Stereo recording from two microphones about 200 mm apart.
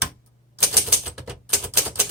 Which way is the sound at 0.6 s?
5° right (ahead or behind).